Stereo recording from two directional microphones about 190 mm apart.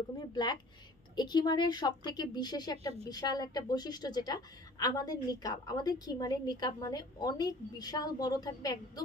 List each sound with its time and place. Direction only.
0.3 s speech: 20° left (ahead or behind)